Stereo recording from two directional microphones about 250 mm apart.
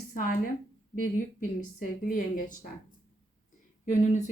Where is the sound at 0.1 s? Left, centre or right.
Left.